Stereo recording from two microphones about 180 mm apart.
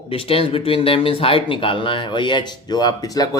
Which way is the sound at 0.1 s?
30° left (ahead or behind).